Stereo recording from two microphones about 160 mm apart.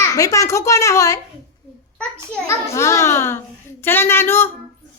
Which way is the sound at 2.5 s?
15° left (ahead or behind).